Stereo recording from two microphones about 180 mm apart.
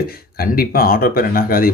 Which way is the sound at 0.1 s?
55° left (ahead or behind).